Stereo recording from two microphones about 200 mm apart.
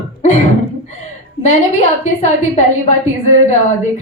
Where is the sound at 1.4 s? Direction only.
35° left (ahead or behind).